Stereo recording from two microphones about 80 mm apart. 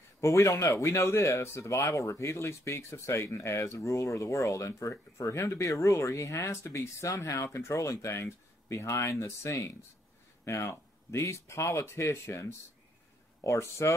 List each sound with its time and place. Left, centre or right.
0.2 s speech: left